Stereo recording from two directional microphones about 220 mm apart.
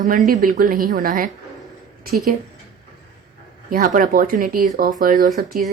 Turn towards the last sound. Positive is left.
turn(degrees=-40)  # may be behind; listen again after turning